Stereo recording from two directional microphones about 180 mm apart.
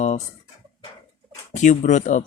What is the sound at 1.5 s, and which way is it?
Speech, 40° left (ahead or behind).